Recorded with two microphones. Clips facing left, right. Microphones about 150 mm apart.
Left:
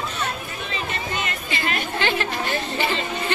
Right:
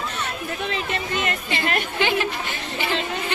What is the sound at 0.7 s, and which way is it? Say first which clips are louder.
Chatter: even; 60° right (ahead or behind).